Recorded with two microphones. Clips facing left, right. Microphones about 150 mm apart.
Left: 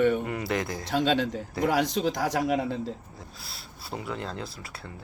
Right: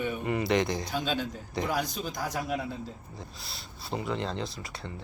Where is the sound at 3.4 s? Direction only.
Centre (ahead or behind).